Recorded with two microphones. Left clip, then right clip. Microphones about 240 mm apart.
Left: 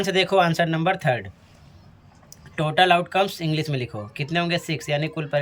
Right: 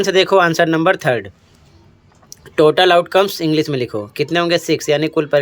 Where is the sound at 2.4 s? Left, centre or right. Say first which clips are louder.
Right 8 dB; right.